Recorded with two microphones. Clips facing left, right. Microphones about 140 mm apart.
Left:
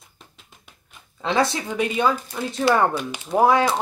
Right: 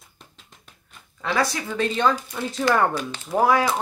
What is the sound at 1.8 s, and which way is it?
Speech, 10° left (ahead or behind).